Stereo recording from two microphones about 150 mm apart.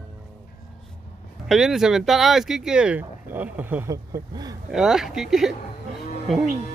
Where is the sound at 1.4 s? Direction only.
Centre (ahead or behind).